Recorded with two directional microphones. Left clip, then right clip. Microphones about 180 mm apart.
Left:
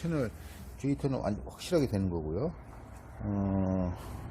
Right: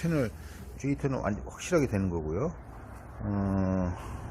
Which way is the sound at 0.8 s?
15° left (ahead or behind).